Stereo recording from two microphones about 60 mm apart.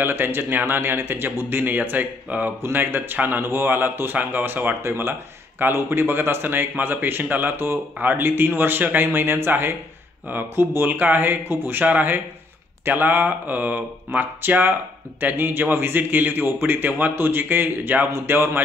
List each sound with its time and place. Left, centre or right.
0.0 s a man's voice: right
10.9 s a man's voice: right
11.8 s a man's voice: right